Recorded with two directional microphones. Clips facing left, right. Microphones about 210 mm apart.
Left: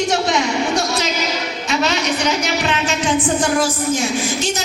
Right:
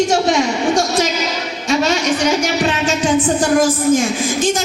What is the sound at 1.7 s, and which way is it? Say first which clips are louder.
Speech: right 4 dB; 45° right (ahead or behind).